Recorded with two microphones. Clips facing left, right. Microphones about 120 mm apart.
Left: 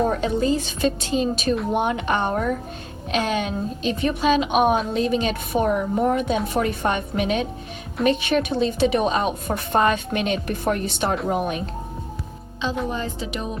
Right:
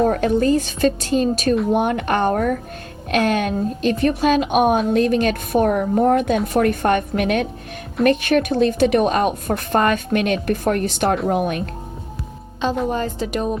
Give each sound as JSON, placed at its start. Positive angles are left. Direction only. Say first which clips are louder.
{"t": 0.1, "sound": "a woman's voice", "louder": "right 4 dB", "side_deg": -55}
{"t": 12.9, "sound": "a woman's voice", "louder": "right 5 dB", "side_deg": -45}